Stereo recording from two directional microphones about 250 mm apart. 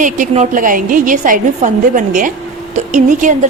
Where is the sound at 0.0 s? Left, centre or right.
Right.